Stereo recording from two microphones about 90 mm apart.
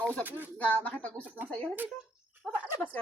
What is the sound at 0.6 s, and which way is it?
Speech, 15° left (ahead or behind).